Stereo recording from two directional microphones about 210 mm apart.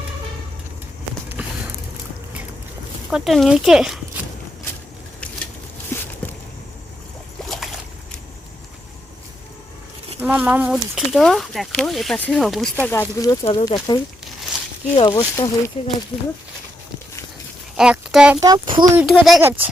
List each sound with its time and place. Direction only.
1.4 s vehicle: 5° right (ahead or behind)
3.1 s speech: centre (ahead or behind)
5.9 s a sound: 10° left (ahead or behind)
7.4 s boat: centre (ahead or behind)
10.2 s speech: 5° right (ahead or behind)
12.8 s speech: 10° left (ahead or behind)
17.7 s speech: 5° right (ahead or behind)
18.3 s speech: 20° right (ahead or behind)
18.9 s speech: centre (ahead or behind)